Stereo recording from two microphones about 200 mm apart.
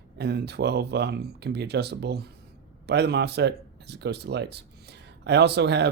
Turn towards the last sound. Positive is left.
turn(degrees=-60)  # may be behind; listen again after turning